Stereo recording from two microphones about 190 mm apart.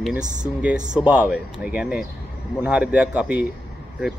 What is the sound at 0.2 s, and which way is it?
Speech, 40° right (ahead or behind).